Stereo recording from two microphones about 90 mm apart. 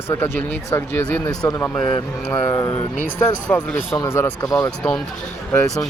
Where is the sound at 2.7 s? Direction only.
30° left (ahead or behind).